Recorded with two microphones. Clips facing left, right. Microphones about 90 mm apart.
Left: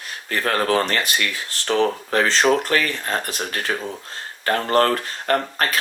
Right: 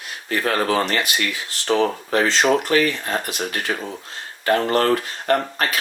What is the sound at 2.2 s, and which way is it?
Speech, 40° left (ahead or behind).